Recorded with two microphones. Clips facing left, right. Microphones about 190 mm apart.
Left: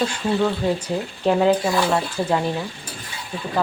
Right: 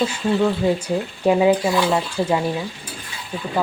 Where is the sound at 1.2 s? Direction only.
10° right (ahead or behind).